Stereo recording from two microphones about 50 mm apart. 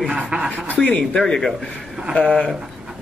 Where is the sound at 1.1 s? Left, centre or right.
Centre.